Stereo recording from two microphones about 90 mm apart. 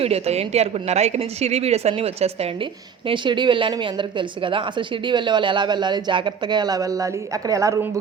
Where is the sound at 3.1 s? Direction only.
60° right (ahead or behind).